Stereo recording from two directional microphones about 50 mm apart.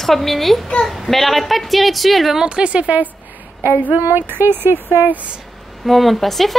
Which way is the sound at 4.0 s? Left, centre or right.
Right.